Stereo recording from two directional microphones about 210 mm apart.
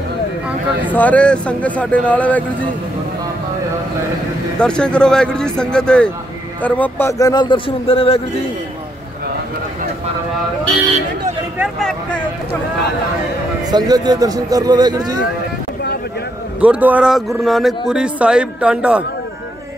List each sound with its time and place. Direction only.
0.9 s speech: 5° left (ahead or behind)
4.6 s a man's voice: 5° left (ahead or behind); by 8.2 s 25° left (ahead or behind)
11.5 s speech: 5° right (ahead or behind)
13.7 s speech: 20° right (ahead or behind)
16.6 s a man's voice: 5° right (ahead or behind)